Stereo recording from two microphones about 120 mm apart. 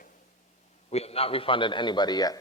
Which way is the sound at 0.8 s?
60° left (ahead or behind).